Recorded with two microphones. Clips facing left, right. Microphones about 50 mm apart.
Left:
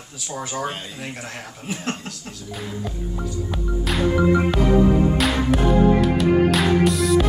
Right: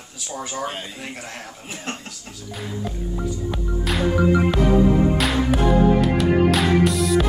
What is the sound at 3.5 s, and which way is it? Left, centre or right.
Music, centre.